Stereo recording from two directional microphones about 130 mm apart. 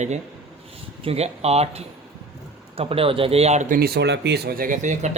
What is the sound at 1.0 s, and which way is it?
A man's voice, 50° right (ahead or behind).